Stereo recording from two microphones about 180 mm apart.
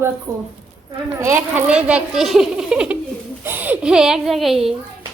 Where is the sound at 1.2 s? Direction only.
15° right (ahead or behind).